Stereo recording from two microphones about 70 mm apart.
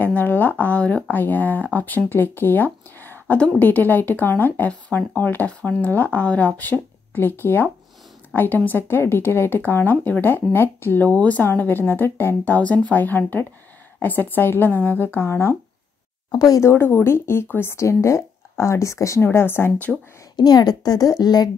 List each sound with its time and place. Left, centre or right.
0.0 s speech: left
16.3 s speech: left
16.6 s speech: left
19.2 s speech: left
20.3 s a woman's voice: left